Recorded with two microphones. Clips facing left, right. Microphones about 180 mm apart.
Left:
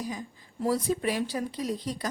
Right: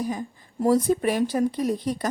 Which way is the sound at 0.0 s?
50° right (ahead or behind).